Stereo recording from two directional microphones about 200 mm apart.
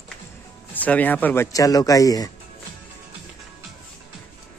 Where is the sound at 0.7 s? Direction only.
10° left (ahead or behind).